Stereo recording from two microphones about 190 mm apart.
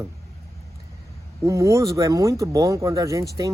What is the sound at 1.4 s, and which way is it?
Speech, 15° right (ahead or behind).